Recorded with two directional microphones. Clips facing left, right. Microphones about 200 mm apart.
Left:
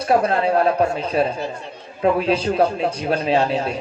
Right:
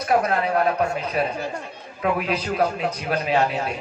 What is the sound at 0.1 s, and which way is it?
A man's voice, 30° left (ahead or behind).